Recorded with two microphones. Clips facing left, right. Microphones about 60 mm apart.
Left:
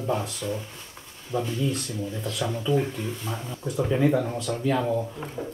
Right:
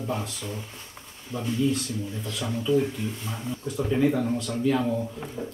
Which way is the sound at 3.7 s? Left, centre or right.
Centre.